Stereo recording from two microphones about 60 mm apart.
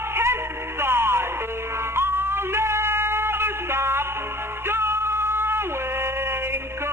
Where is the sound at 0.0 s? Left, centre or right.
Right.